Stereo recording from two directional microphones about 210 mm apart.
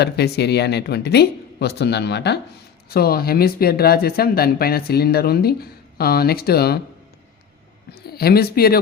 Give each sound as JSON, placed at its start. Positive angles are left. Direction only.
{"t": 0.0, "sound": "speech", "side_deg": 50}
{"t": 8.1, "sound": "speech", "side_deg": 45}